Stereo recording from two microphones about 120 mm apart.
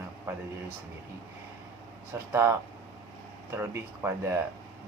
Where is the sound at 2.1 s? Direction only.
20° right (ahead or behind).